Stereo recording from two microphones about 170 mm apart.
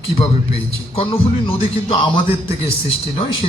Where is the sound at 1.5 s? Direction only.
35° left (ahead or behind).